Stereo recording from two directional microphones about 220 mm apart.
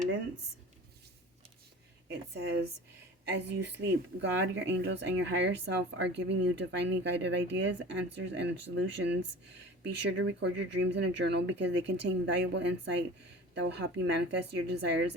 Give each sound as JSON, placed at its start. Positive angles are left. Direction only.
{"t": 2.0, "sound": "a woman's voice", "side_deg": -50}